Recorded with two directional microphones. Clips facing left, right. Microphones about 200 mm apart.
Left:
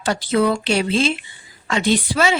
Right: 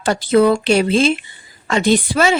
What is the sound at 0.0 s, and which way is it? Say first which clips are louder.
A woman's voice: right 5 dB; 50° right (ahead or behind).